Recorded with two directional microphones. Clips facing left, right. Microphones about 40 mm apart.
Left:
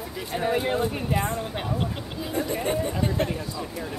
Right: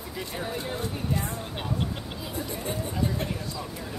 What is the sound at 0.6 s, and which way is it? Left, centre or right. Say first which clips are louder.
Speech: left 6 dB; left.